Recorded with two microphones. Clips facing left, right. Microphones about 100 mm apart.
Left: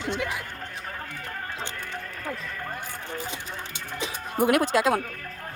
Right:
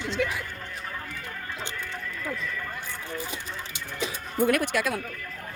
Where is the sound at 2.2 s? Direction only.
45° left (ahead or behind).